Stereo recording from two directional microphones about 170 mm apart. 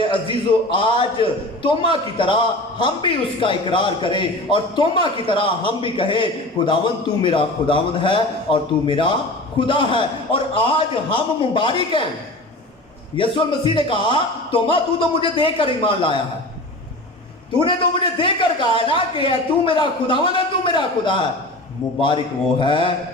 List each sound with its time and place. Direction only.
0.0 s a man's voice: 30° left (ahead or behind)
13.1 s a man's voice: 30° left (ahead or behind)
17.6 s a man's voice: 30° left (ahead or behind)